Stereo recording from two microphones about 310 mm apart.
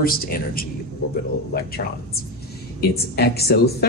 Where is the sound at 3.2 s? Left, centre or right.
Left.